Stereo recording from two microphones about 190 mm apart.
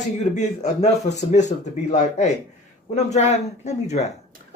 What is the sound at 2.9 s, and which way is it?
Speech, 35° left (ahead or behind).